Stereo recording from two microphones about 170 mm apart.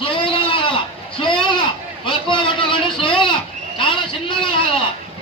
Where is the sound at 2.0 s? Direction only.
30° left (ahead or behind).